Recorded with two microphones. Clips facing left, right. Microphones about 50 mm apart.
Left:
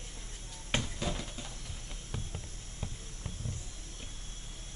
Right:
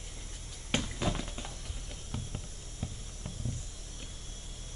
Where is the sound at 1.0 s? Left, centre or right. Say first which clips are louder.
Right 3 dB; centre.